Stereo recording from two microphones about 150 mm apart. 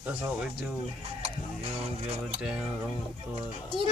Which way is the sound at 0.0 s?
10° right (ahead or behind).